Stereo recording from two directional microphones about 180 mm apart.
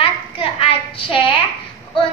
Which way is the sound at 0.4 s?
30° left (ahead or behind).